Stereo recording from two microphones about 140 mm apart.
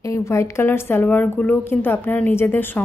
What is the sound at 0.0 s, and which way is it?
Speech, 20° left (ahead or behind).